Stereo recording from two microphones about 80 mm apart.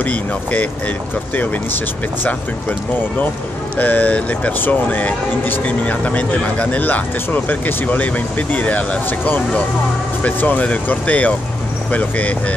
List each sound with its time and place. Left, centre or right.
0.0 s speech: centre
3.7 s speech: left